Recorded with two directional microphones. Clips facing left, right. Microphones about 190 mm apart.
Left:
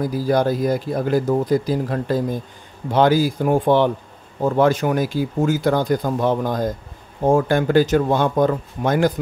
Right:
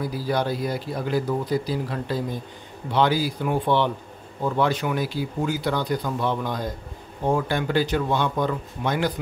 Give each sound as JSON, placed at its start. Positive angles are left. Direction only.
{"t": 0.0, "sound": "speech", "side_deg": 45}